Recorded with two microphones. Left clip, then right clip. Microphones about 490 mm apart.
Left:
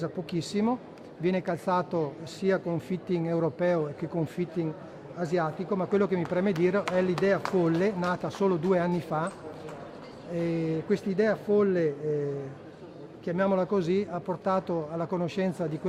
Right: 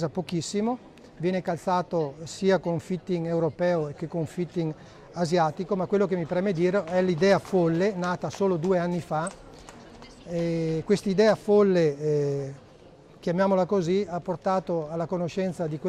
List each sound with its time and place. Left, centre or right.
0.0 s speech: right
5.1 s speech: right
10.3 s speech: right